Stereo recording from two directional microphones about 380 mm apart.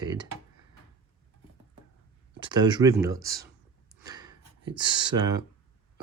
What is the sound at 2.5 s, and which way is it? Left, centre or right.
Speech, centre.